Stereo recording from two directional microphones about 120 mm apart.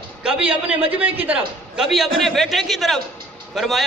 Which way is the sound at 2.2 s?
Centre (ahead or behind).